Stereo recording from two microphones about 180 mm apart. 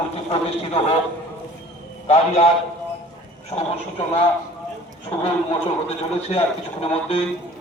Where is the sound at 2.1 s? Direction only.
35° left (ahead or behind).